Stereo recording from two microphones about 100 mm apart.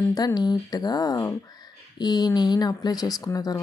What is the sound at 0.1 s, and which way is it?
Speech, 40° left (ahead or behind).